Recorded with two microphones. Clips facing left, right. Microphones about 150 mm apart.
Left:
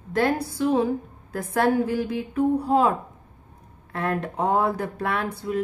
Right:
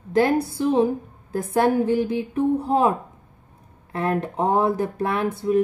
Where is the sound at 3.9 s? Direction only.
20° right (ahead or behind).